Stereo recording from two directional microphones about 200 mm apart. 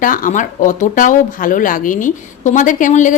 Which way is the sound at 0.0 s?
40° left (ahead or behind).